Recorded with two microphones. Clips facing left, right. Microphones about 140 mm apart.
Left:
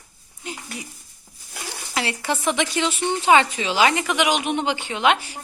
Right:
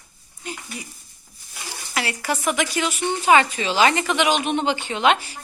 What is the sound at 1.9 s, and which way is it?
A woman's voice, 25° left (ahead or behind).